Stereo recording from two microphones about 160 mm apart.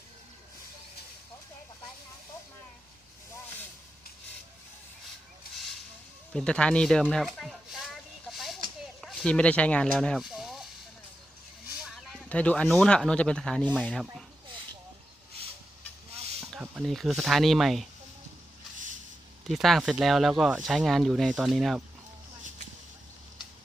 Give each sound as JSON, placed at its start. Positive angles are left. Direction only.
{"t": 6.3, "sound": "speech", "side_deg": 5}
{"t": 8.3, "sound": "a sound", "side_deg": 0}
{"t": 11.8, "sound": "speech", "side_deg": 0}
{"t": 16.1, "sound": "a sound", "side_deg": -40}
{"t": 16.5, "sound": "speech", "side_deg": -5}
{"t": 19.5, "sound": "speech", "side_deg": 0}